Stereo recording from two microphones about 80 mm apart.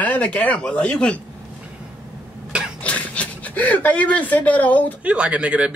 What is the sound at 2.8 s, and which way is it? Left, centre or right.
Speech, centre.